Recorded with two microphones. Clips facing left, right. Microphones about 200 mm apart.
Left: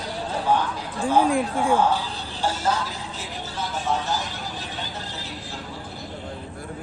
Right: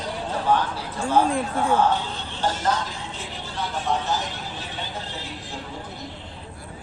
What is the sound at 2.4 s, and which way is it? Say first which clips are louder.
Speech: even; 10° left (ahead or behind).